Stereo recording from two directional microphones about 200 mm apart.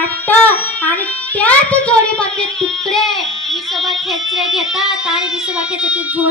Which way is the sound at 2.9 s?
Centre (ahead or behind).